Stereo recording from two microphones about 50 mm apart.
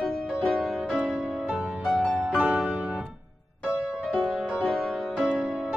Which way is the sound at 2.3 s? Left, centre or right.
Centre.